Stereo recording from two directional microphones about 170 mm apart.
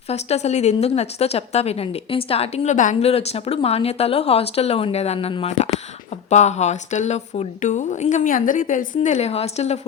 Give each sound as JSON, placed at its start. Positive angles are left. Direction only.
{"t": 0.1, "sound": "a woman's voice", "side_deg": 40}